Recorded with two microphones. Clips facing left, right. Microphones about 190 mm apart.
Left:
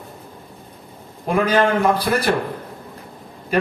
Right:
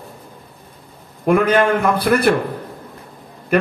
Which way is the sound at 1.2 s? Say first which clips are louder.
Right 3 dB; 60° right (ahead or behind).